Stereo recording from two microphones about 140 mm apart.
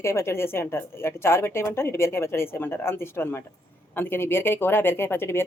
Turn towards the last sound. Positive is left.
turn(degrees=15)  # may be behind; listen again after turning